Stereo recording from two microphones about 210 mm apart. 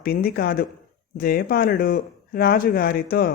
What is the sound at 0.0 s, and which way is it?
A man's voice, 45° left (ahead or behind).